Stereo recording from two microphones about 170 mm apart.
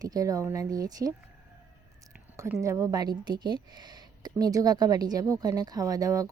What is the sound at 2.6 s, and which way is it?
Speech, 20° right (ahead or behind).